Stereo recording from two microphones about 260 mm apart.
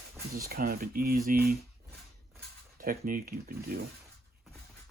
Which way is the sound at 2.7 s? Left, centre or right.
Right.